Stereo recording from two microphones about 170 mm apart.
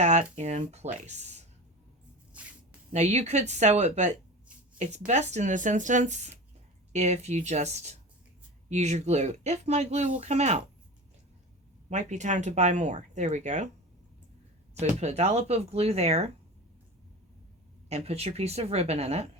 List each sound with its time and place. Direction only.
0.0 s speech: 45° right (ahead or behind)
2.9 s speech: 40° right (ahead or behind)
11.9 s speech: 45° right (ahead or behind)
14.8 s speech: 40° right (ahead or behind)
17.8 s speech: 40° right (ahead or behind)